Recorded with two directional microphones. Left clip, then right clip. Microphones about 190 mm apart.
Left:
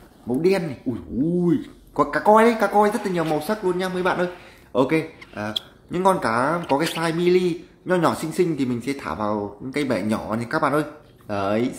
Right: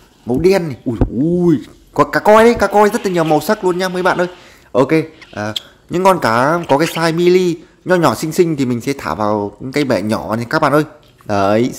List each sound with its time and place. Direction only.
0.3 s a man's voice: 45° right (ahead or behind)